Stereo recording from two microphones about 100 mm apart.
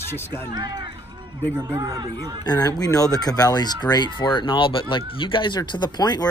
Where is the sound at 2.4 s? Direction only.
40° left (ahead or behind).